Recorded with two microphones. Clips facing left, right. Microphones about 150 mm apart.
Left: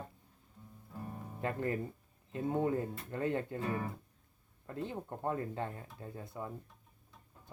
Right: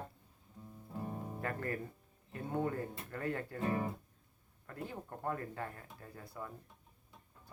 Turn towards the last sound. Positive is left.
turn(degrees=20)  # may be behind; listen again after turning